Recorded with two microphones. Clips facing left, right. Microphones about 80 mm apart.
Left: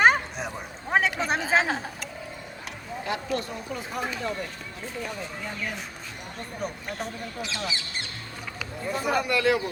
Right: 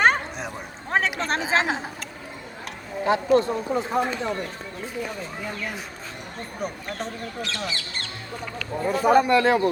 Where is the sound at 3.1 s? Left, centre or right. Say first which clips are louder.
Right 11 dB; right.